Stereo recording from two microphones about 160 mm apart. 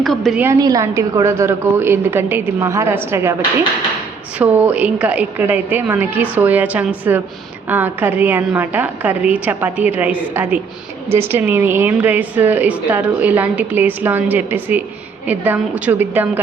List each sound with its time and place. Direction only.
0.0 s a woman's voice: centre (ahead or behind)
0.3 s a woman's voice: 20° right (ahead or behind)
4.4 s a woman's voice: 10° right (ahead or behind)